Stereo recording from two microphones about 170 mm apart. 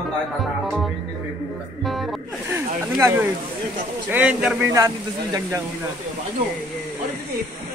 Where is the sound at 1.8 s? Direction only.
Centre (ahead or behind).